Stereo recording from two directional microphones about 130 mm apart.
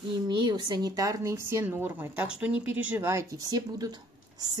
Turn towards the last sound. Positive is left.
turn(degrees=-30)  # may be behind; listen again after turning